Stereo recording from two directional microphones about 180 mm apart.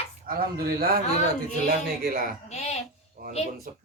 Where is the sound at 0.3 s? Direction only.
55° right (ahead or behind).